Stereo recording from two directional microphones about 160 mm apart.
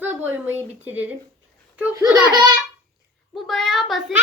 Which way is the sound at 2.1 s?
25° right (ahead or behind).